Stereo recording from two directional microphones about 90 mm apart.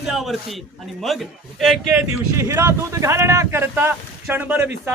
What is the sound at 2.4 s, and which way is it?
Speech, 30° right (ahead or behind).